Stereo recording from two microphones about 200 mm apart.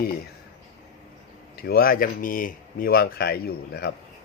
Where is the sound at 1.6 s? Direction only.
50° left (ahead or behind).